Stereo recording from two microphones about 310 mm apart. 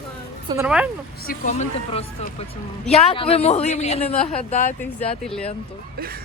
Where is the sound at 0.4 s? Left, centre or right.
Centre.